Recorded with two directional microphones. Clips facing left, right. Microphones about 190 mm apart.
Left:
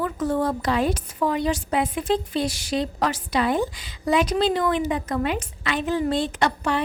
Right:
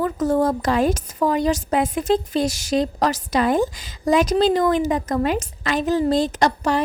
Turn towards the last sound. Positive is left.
turn(degrees=-40)  # may be behind; listen again after turning